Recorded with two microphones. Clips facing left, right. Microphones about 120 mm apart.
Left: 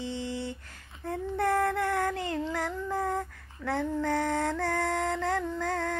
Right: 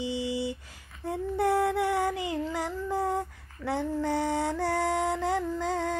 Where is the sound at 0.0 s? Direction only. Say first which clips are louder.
Right 4 dB; 10° right (ahead or behind).